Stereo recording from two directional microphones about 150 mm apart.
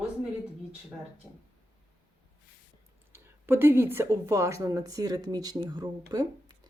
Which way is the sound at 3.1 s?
15° right (ahead or behind).